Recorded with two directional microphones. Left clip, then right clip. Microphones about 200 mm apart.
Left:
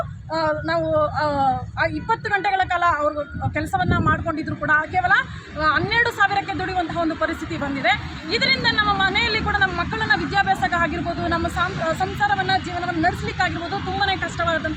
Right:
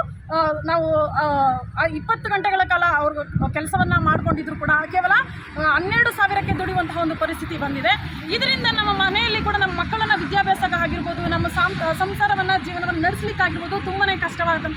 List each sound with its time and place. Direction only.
0.3 s a woman's voice: 5° left (ahead or behind)